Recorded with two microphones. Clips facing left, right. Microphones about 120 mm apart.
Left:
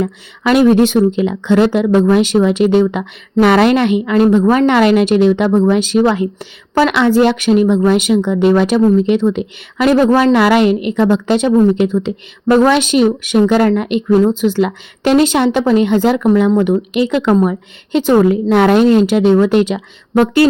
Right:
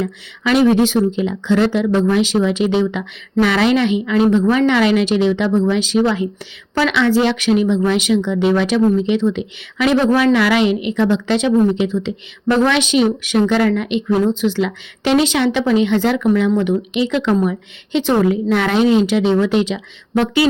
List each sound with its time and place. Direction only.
0.0 s speech: 50° left (ahead or behind)